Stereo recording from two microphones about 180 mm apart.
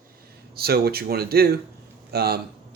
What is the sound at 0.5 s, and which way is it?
Speech, 60° right (ahead or behind).